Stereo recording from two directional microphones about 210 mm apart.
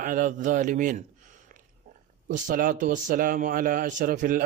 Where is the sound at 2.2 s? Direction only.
40° right (ahead or behind).